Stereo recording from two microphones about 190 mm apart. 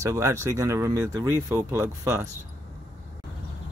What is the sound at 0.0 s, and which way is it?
Speech, 15° right (ahead or behind).